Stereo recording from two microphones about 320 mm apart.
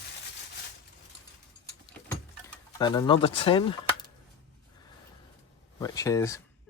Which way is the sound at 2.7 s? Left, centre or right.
Centre.